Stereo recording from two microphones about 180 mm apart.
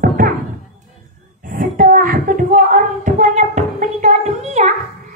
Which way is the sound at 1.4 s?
50° right (ahead or behind).